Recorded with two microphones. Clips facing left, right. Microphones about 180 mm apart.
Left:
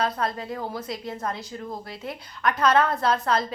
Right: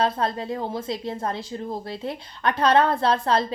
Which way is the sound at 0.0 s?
25° right (ahead or behind).